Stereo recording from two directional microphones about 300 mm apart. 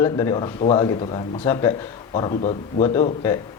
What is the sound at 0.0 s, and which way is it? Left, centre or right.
A man's voice, centre.